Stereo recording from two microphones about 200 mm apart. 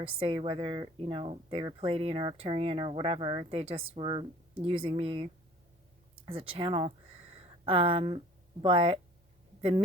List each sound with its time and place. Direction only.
0.0 s speech: 25° right (ahead or behind)
6.5 s speech: 30° right (ahead or behind)